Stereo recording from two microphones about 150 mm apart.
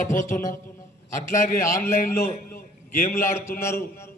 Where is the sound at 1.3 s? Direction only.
60° left (ahead or behind).